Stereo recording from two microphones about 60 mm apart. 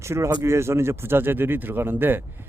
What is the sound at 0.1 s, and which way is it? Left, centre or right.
Speech, right.